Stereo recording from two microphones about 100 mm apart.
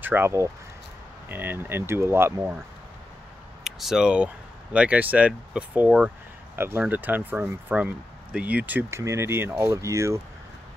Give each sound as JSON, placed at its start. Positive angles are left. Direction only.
{"t": 0.0, "sound": "speech", "side_deg": -20}
{"t": 3.6, "sound": "speech", "side_deg": -5}
{"t": 6.5, "sound": "speech", "side_deg": -25}
{"t": 8.9, "sound": "speech", "side_deg": -30}